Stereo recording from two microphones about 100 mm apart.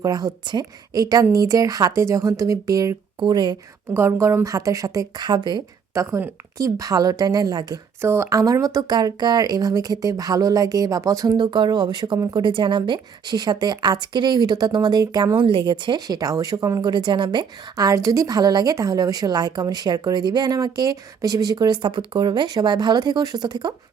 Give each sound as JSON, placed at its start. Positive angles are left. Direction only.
{"t": 0.0, "sound": "a woman's voice", "side_deg": -40}
{"t": 3.9, "sound": "a woman's voice", "side_deg": -25}
{"t": 5.9, "sound": "a woman's voice", "side_deg": -30}
{"t": 8.0, "sound": "a woman's voice", "side_deg": -25}
{"t": 11.3, "sound": "a woman's voice", "side_deg": -50}
{"t": 17.7, "sound": "a woman's voice", "side_deg": -35}